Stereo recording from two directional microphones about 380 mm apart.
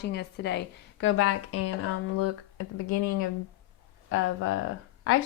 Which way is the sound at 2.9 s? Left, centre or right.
Left.